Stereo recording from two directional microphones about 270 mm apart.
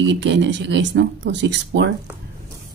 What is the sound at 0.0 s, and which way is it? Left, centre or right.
Speech, right.